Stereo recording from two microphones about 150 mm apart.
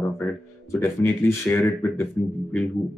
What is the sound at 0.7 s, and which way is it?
Speech, 5° left (ahead or behind).